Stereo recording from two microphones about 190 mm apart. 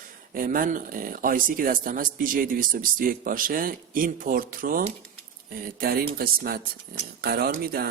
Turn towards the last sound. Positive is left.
turn(degrees=-55)  # may be behind; listen again after turning